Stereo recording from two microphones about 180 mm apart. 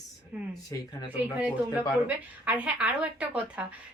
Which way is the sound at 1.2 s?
10° right (ahead or behind).